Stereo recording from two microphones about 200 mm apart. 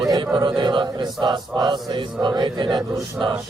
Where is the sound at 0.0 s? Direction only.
15° right (ahead or behind).